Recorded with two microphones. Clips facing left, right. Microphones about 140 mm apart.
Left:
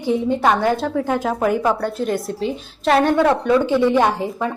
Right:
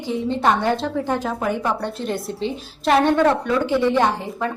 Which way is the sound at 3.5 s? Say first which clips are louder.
Left 3 dB; 15° left (ahead or behind).